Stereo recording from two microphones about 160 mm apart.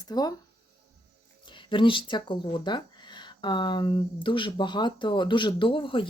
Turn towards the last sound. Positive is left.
turn(degrees=30)  # may be behind; listen again after turning